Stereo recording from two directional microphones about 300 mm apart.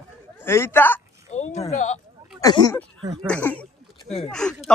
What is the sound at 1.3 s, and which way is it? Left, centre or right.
Speech, left.